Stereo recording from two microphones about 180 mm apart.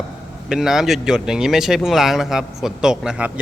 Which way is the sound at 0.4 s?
Centre (ahead or behind).